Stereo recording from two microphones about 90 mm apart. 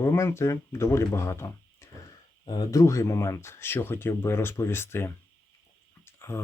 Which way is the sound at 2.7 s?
35° left (ahead or behind).